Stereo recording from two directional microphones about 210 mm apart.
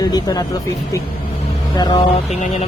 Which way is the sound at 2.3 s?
30° left (ahead or behind).